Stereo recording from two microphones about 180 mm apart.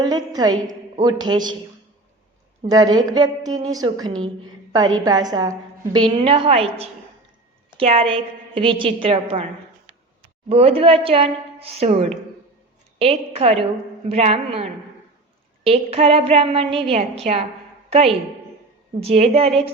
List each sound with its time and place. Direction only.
0.0 s a woman's voice: 20° right (ahead or behind)
2.6 s a woman's voice: 20° right (ahead or behind)
10.5 s a woman's voice: 30° right (ahead or behind)